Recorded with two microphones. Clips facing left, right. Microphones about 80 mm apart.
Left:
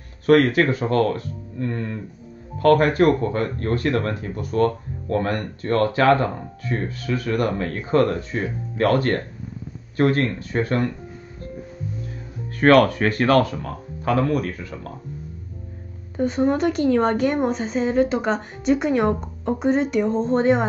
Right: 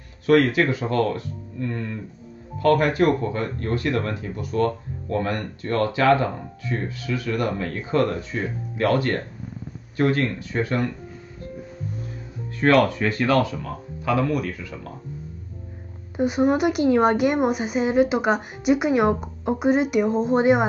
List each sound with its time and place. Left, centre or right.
0.3 s speech: left
12.5 s speech: left
16.2 s a woman's voice: centre